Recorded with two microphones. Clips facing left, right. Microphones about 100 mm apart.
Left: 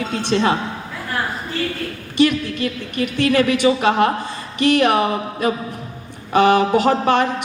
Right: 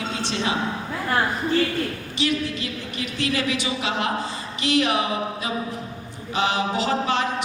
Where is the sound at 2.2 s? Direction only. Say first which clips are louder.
Left 8 dB; 55° left (ahead or behind).